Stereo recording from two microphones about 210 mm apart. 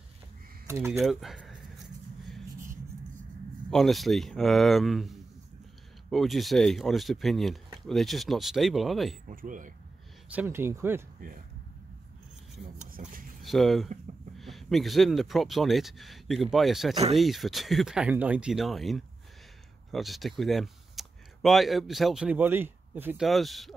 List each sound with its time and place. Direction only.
0.7 s speech: 15° right (ahead or behind)
1.0 s a sound: centre (ahead or behind)
3.7 s speech: centre (ahead or behind)
9.3 s speech: 40° right (ahead or behind)
10.3 s speech: 10° right (ahead or behind)
12.7 s speech: 40° right (ahead or behind)
13.4 s speech: centre (ahead or behind)